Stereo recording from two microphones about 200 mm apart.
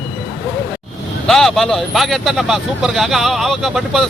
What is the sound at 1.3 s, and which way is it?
Speech, centre (ahead or behind).